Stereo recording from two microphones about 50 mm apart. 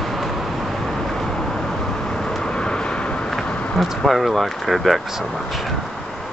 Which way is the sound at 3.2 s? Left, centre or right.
Centre.